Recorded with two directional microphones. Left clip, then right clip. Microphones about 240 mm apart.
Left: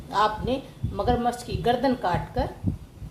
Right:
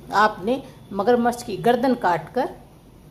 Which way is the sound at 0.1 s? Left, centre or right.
Right.